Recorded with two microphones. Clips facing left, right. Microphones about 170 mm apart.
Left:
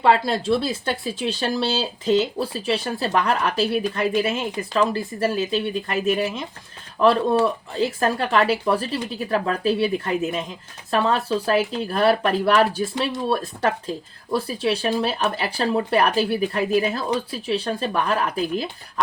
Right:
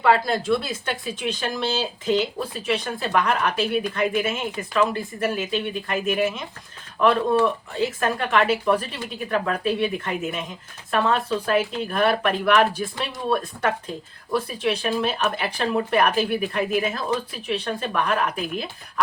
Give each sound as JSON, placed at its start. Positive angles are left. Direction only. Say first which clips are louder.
{"t": 0.0, "sound": "speech", "louder": "left 1 dB", "side_deg": 30}
{"t": 7.9, "sound": "speech", "louder": "left 2 dB", "side_deg": 30}